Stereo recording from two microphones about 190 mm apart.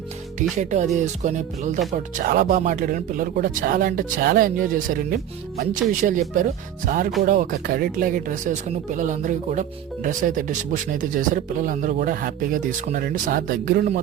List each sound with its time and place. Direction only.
0.5 s music: 40° right (ahead or behind)
2.1 s speech: 45° right (ahead or behind)